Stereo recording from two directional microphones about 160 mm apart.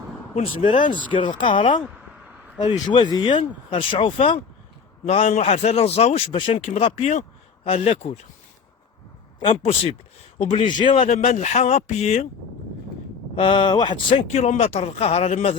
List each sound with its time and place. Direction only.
0.3 s speech: 35° left (ahead or behind)
2.8 s speech: 25° left (ahead or behind)
9.4 s speech: 35° left (ahead or behind)
11.1 s speech: 40° left (ahead or behind)
13.3 s speech: 30° left (ahead or behind)